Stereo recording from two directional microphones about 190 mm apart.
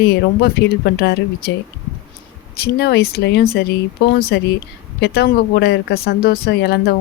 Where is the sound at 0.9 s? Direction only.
60° left (ahead or behind).